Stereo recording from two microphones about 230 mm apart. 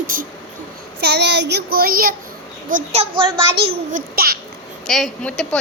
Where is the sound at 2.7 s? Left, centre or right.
Right.